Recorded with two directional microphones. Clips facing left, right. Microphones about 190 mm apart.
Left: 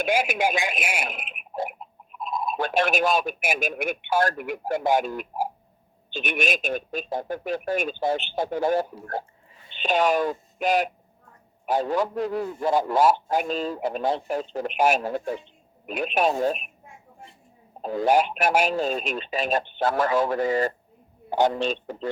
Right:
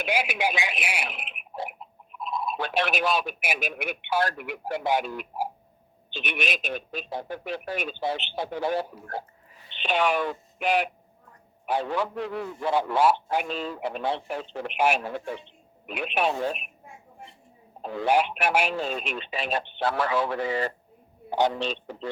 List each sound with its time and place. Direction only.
0.0 s a man's voice: 45° left (ahead or behind)
17.8 s a man's voice: 40° left (ahead or behind)